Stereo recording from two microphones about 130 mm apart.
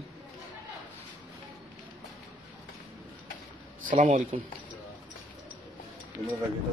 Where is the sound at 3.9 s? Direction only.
70° right (ahead or behind).